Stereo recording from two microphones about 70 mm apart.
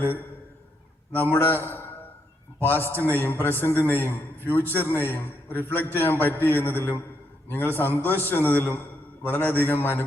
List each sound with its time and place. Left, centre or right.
1.1 s a man's voice: left